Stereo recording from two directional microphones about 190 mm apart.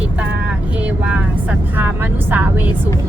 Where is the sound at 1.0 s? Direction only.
5° right (ahead or behind).